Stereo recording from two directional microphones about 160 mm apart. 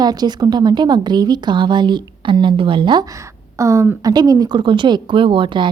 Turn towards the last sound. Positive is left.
turn(degrees=-30)  # may be behind; listen again after turning